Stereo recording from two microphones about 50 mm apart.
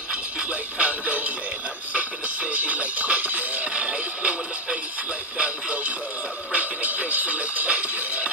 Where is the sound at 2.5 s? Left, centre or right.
Right.